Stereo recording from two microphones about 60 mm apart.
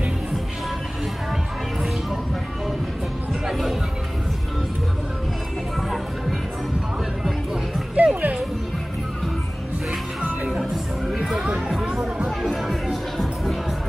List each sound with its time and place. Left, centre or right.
3.4 s music: centre
8.0 s music: right
10.4 s music: centre
11.3 s chatter: centre
12.3 s music: centre